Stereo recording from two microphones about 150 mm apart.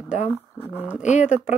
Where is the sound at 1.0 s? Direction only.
50° left (ahead or behind).